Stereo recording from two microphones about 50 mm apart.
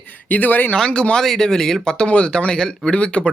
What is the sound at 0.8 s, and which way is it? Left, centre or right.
Speech, centre.